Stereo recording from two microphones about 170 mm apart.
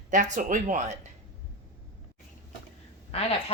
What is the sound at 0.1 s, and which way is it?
Speech, 50° right (ahead or behind).